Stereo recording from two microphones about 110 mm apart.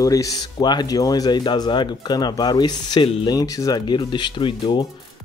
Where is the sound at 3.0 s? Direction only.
55° left (ahead or behind).